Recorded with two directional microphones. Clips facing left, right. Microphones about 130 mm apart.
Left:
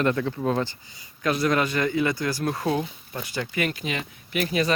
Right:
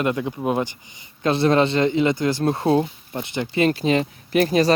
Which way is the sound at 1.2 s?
30° right (ahead or behind).